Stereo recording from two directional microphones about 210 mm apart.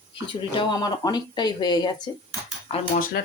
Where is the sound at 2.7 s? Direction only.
40° left (ahead or behind).